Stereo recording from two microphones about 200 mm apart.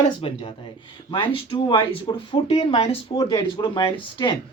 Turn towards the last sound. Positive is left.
turn(degrees=25)  # may be behind; listen again after turning